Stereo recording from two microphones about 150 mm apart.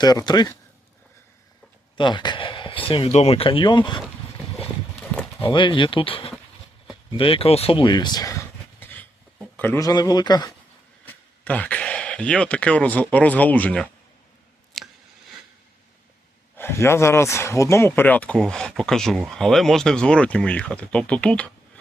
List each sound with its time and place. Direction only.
0.0 s speech: 25° left (ahead or behind)
2.0 s speech: 30° left (ahead or behind)
5.4 s speech: 35° left (ahead or behind)
11.0 s speech: 10° left (ahead or behind)
14.8 s a sound: centre (ahead or behind)
16.6 s speech: 15° left (ahead or behind)